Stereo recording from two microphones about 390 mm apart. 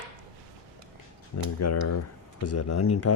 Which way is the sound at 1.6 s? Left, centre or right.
Left.